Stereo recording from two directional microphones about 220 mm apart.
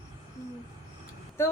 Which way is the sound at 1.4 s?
10° left (ahead or behind).